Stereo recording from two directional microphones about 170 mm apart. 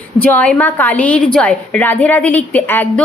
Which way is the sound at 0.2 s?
10° left (ahead or behind).